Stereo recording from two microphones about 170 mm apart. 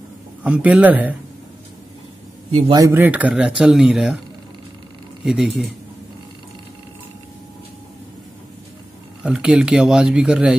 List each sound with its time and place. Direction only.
0.4 s speech: 5° right (ahead or behind)
2.7 s speech: 15° right (ahead or behind)
5.2 s speech: 5° right (ahead or behind)
9.2 s speech: 5° right (ahead or behind)